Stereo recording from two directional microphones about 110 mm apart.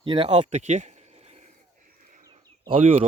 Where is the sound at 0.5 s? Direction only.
90° right.